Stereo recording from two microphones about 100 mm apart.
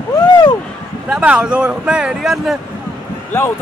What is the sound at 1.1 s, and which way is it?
Speech, 10° right (ahead or behind).